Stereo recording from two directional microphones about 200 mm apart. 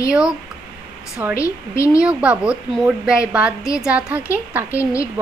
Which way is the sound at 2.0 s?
5° right (ahead or behind).